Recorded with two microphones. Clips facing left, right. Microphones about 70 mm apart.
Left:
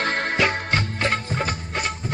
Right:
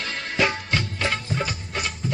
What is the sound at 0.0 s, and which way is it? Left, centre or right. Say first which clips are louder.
Music: left 3 dB; left.